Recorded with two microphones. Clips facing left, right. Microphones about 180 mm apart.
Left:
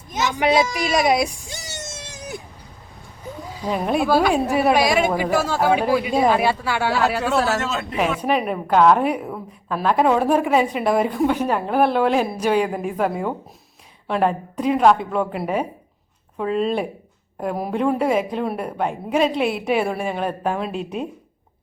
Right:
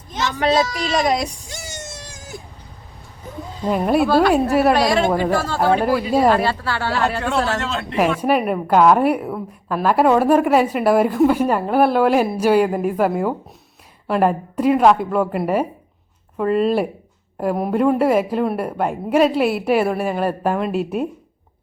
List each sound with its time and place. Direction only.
0.1 s a woman's voice: 10° left (ahead or behind)
1.8 s a sound: 20° left (ahead or behind)
3.6 s speech: centre (ahead or behind)
4.7 s a woman's voice: 10° left (ahead or behind)